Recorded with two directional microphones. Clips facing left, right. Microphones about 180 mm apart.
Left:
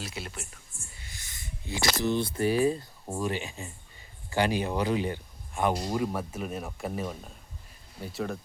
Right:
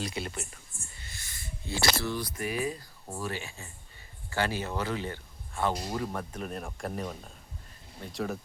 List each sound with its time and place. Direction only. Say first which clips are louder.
0.0 s a sound: right 4 dB; centre (ahead or behind)
1.0 s speech: even; 15° left (ahead or behind)
3.1 s speech: left 5 dB; 20° left (ahead or behind); by 8.4 s centre (ahead or behind)